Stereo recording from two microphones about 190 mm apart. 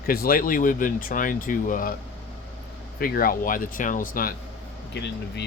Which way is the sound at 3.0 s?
50° left (ahead or behind).